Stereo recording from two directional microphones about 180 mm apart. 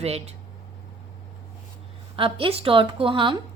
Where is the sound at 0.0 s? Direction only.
35° right (ahead or behind).